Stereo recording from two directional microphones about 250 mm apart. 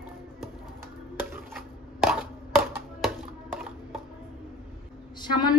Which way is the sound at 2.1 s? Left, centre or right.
Centre.